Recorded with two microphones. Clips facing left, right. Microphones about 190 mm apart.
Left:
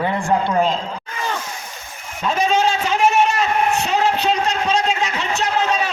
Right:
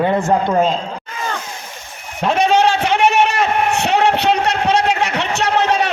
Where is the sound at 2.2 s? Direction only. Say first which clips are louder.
Right 4 dB; 70° right (ahead or behind).